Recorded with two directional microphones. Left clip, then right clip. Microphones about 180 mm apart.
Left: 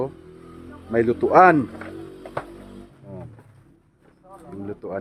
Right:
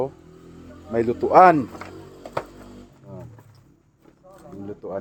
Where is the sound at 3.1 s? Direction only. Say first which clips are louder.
Left 1 dB; 20° left (ahead or behind).